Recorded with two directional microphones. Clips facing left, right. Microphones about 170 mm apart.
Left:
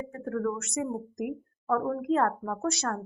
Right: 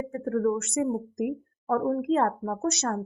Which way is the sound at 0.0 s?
25° right (ahead or behind).